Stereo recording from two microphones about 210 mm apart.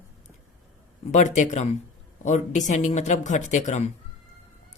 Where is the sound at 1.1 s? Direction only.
35° left (ahead or behind).